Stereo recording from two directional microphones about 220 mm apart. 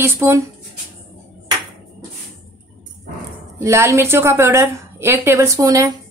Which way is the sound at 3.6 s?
15° right (ahead or behind).